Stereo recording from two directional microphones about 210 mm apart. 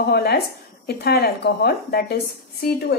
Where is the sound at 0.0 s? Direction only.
50° left (ahead or behind).